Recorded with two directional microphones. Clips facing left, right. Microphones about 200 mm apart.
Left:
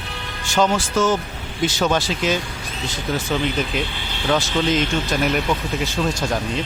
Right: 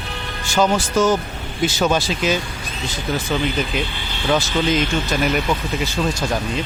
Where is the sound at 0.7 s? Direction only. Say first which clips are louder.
Right 2 dB; 15° right (ahead or behind).